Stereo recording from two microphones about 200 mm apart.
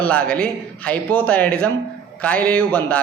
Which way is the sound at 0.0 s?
5° left (ahead or behind).